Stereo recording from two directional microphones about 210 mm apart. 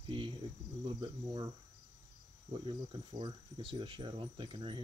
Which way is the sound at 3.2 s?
25° right (ahead or behind).